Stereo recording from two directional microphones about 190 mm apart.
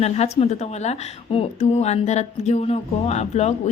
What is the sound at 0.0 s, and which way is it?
A woman's voice, 35° left (ahead or behind).